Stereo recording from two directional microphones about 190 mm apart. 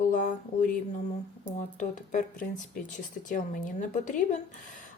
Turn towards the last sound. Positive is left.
turn(degrees=45)  # may be behind; listen again after turning